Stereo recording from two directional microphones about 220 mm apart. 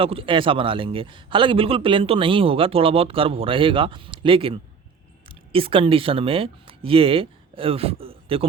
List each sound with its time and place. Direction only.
0.0 s a man's voice: 25° right (ahead or behind)